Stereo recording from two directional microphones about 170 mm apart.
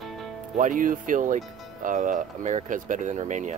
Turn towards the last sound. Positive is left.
turn(degrees=-45)  # may be behind; listen again after turning